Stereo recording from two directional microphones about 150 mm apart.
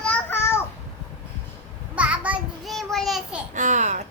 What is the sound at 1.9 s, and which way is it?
Child singing, 10° right (ahead or behind).